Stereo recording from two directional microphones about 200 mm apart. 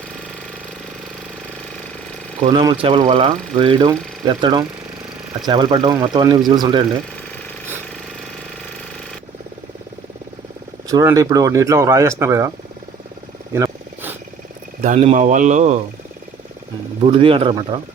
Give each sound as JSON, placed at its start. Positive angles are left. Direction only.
{"t": 2.5, "sound": "speech", "side_deg": -25}
{"t": 10.8, "sound": "speech", "side_deg": -15}
{"t": 13.5, "sound": "a sound", "side_deg": -10}
{"t": 14.8, "sound": "speech", "side_deg": -35}
{"t": 17.0, "sound": "speech", "side_deg": -25}